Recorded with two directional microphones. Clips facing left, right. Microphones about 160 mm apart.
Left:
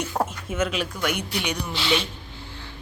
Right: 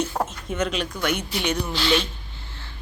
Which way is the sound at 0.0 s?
10° left (ahead or behind).